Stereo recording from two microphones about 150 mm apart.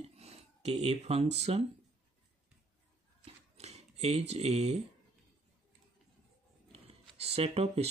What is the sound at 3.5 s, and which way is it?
Speech, 45° right (ahead or behind).